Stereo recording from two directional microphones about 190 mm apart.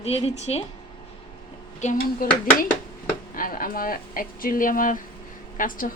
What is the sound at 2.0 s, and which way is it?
Speech, 50° left (ahead or behind).